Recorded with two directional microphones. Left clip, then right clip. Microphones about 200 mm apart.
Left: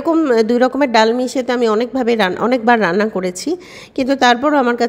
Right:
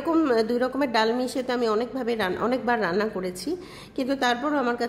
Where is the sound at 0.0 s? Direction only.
25° left (ahead or behind).